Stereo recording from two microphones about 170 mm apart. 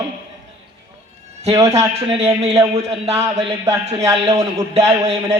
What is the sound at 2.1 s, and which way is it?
A man's voice, 35° right (ahead or behind).